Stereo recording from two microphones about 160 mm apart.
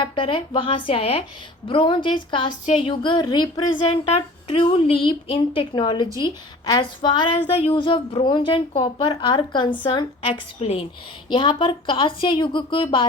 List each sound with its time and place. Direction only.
0.0 s a woman's voice: 30° left (ahead or behind)